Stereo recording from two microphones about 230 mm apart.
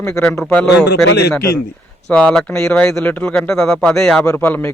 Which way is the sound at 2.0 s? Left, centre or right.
Centre.